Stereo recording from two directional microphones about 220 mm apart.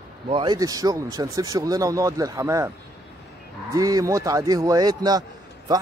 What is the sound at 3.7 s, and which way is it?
Speech, 15° right (ahead or behind).